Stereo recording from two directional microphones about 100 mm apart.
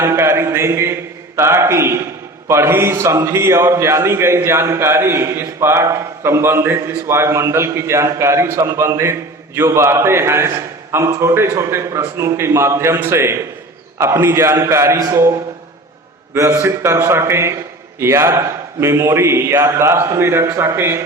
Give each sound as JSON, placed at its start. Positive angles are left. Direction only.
{"t": 0.0, "sound": "a man's voice", "side_deg": -25}
{"t": 16.3, "sound": "a man's voice", "side_deg": -25}